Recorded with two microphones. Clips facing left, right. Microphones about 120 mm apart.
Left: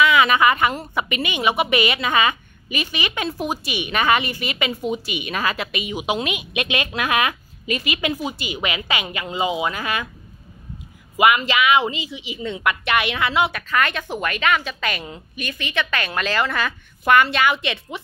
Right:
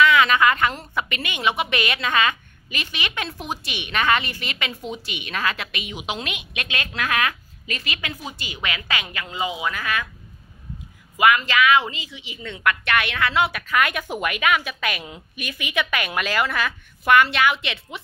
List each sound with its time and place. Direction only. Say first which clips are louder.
0.0 s a woman's voice: left 1 dB; 10° left (ahead or behind)
11.1 s a woman's voice: left 1 dB; 20° left (ahead or behind)
13.4 s a woman's voice: even; 5° right (ahead or behind)